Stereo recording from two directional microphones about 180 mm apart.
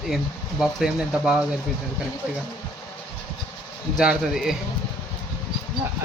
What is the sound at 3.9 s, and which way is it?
Speech, centre (ahead or behind).